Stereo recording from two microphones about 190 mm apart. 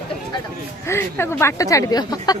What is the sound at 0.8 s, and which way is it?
Speech, 15° left (ahead or behind).